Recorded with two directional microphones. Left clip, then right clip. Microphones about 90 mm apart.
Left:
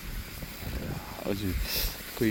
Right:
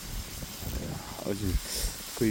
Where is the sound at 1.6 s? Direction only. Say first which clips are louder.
Left 3 dB; 25° right (ahead or behind).